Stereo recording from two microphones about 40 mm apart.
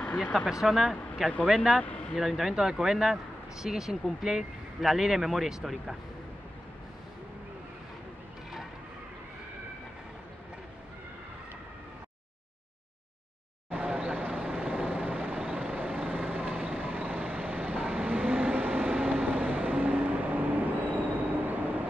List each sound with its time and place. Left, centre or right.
0.3 s speech: centre
0.7 s speech: centre
1.8 s a sound: left
2.1 s speech: centre
13.7 s vehicle: right
16.8 s vehicle: right